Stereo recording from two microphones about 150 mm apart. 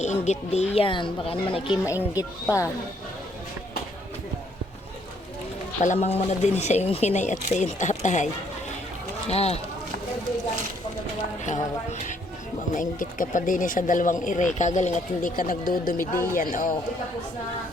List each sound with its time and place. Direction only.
0.0 s speech: 50° left (ahead or behind)
2.1 s speech: 20° left (ahead or behind)
5.8 s speech: 50° left (ahead or behind)
9.3 s speech: 45° left (ahead or behind)
11.4 s speech: 55° left (ahead or behind)